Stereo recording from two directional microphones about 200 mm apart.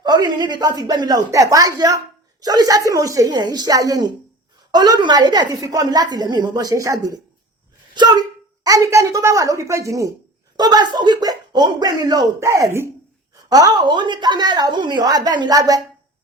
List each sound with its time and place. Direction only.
0.0 s a woman's voice: 20° right (ahead or behind)
8.6 s a woman's voice: 15° right (ahead or behind)